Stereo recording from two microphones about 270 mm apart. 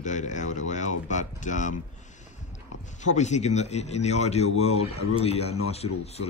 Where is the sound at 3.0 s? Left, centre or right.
Left.